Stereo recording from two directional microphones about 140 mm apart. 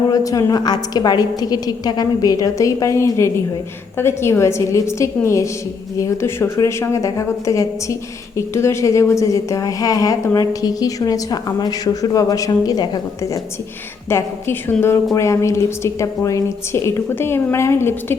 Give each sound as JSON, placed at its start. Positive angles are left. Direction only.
{"t": 0.1, "sound": "a woman's voice", "side_deg": 25}